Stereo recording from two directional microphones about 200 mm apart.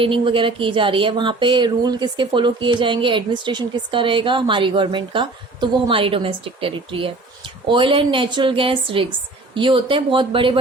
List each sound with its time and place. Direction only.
0.0 s speech: 25° right (ahead or behind)